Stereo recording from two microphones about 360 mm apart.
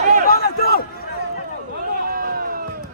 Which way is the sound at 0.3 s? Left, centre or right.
Left.